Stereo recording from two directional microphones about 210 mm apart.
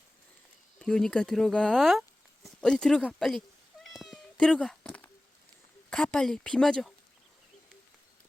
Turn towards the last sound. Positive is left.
turn(degrees=0)  # may be behind; listen again after turning